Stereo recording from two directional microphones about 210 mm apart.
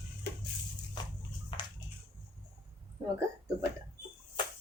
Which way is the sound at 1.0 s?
20° left (ahead or behind).